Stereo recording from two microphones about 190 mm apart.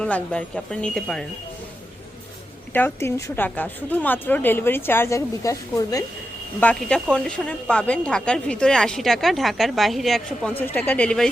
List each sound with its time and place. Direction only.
0.0 s speech: 5° left (ahead or behind)
2.7 s a woman's voice: 10° left (ahead or behind)
6.6 s speech: 5° left (ahead or behind)